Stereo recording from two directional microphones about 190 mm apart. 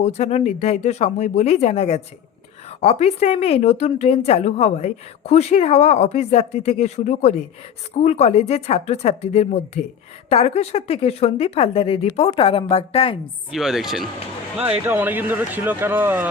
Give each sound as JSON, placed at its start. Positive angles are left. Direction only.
{"t": 0.0, "sound": "a woman's voice", "side_deg": 35}
{"t": 13.5, "sound": "speech", "side_deg": 0}